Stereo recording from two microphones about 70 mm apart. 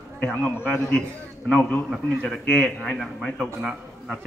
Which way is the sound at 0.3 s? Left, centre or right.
Left.